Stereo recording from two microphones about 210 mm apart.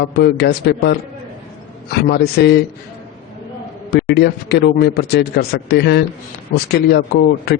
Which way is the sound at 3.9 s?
50° left (ahead or behind).